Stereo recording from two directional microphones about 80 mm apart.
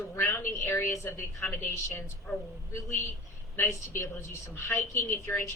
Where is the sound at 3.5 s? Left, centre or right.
Left.